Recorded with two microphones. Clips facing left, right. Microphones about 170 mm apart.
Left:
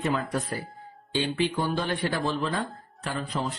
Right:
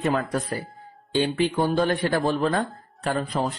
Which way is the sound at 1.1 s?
50° right (ahead or behind).